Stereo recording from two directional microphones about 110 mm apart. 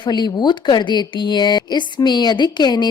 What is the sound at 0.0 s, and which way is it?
A woman's voice, 40° left (ahead or behind).